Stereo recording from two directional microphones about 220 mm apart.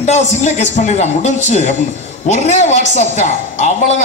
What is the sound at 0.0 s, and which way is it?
A woman's voice, 30° left (ahead or behind).